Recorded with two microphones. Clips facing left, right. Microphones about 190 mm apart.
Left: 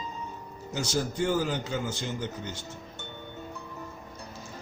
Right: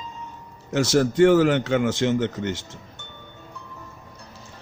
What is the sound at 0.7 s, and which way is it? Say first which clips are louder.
Speech: right 11 dB; 80° right.